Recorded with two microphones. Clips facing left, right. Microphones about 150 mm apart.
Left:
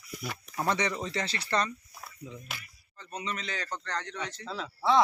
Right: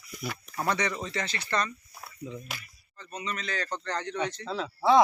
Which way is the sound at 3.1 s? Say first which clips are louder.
Right 2 dB; 25° left (ahead or behind).